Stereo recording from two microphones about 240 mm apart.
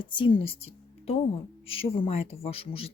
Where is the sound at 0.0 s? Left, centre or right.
Centre.